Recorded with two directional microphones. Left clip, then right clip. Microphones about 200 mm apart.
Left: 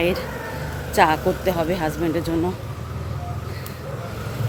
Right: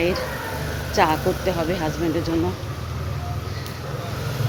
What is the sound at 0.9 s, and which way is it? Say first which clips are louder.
Speech: left 2 dB; 10° left (ahead or behind).